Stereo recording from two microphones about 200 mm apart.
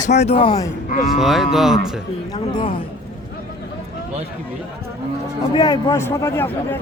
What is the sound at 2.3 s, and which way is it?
Speech, 25° left (ahead or behind).